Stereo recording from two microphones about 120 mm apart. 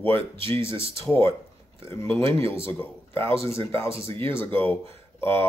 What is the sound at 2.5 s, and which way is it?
Speech, 20° left (ahead or behind).